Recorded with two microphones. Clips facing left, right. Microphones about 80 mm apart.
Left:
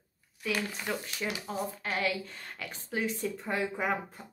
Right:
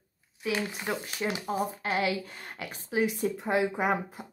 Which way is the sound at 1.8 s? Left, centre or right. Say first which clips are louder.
Right 3 dB; centre.